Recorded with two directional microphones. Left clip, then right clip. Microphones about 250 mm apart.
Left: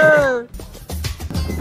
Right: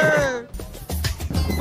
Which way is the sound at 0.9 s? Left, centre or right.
Centre.